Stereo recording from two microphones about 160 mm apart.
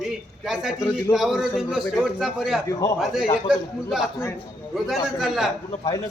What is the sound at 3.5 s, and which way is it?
A man's voice, centre (ahead or behind).